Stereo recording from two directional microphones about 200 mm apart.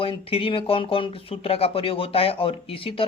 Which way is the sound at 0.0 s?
30° left (ahead or behind).